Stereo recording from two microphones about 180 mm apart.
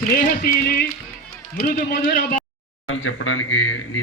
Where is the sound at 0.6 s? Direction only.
60° left (ahead or behind).